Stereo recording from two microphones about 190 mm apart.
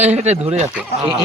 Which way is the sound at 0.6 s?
5° right (ahead or behind).